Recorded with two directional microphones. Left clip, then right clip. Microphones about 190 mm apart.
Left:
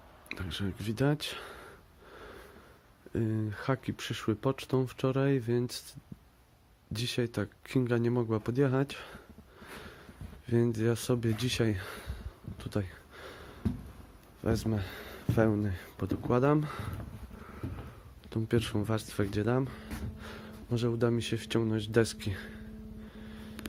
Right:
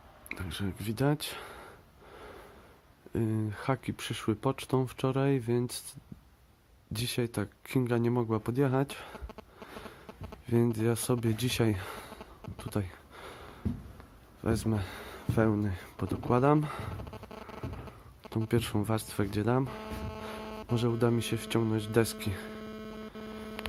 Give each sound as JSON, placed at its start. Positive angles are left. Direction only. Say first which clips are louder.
{"t": 0.3, "sound": "speech", "louder": "even", "side_deg": -5}
{"t": 3.2, "sound": "speech", "louder": "right 1 dB", "side_deg": -10}
{"t": 6.9, "sound": "speech", "louder": "even", "side_deg": -10}
{"t": 10.4, "sound": "speech", "louder": "even", "side_deg": -10}
{"t": 12.5, "sound": "a sound", "louder": "even", "side_deg": -15}
{"t": 14.4, "sound": "speech", "louder": "even", "side_deg": -15}
{"t": 18.2, "sound": "speech", "louder": "even", "side_deg": -15}
{"t": 20.7, "sound": "speech", "louder": "right 1 dB", "side_deg": -20}